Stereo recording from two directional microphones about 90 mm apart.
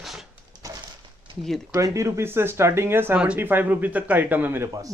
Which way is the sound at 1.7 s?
35° right (ahead or behind).